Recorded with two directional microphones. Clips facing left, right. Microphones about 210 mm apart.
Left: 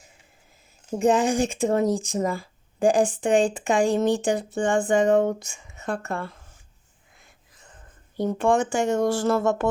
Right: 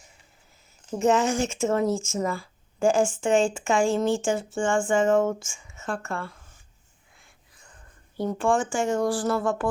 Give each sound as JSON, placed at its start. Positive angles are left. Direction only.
{"t": 0.9, "sound": "speech", "side_deg": 15}
{"t": 2.3, "sound": "a sound", "side_deg": 20}
{"t": 3.1, "sound": "speech", "side_deg": 20}
{"t": 8.1, "sound": "speech", "side_deg": 20}